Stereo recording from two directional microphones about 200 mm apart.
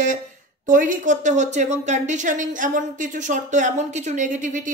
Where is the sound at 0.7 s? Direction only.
40° right (ahead or behind).